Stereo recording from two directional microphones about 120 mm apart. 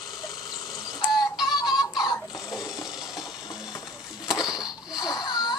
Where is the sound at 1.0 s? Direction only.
35° left (ahead or behind).